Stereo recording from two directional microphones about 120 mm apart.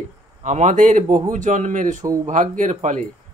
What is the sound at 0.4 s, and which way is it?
Speech, 90° right.